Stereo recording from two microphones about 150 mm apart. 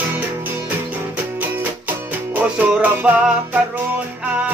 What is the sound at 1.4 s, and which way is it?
Music, 10° right (ahead or behind).